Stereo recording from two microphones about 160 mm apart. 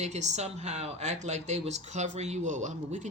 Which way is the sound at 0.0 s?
45° right (ahead or behind).